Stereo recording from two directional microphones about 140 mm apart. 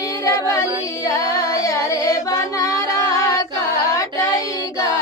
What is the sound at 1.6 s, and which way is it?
Carnatic music, 25° left (ahead or behind).